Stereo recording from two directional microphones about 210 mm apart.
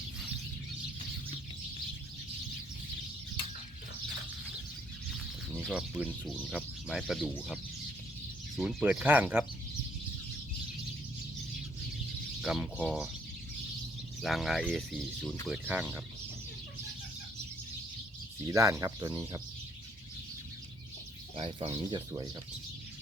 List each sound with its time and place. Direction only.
5.5 s speech: 5° right (ahead or behind)
8.5 s speech: 5° right (ahead or behind)
12.4 s speech: 5° right (ahead or behind)
14.2 s speech: centre (ahead or behind)
18.4 s speech: 15° right (ahead or behind)
21.3 s speech: 25° right (ahead or behind)